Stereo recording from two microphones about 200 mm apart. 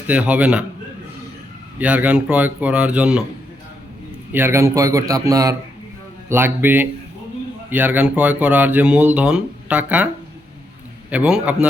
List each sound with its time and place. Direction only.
0.1 s speech: 5° right (ahead or behind)
1.8 s speech: 5° right (ahead or behind)
4.3 s speech: 10° right (ahead or behind)
11.1 s speech: 5° right (ahead or behind)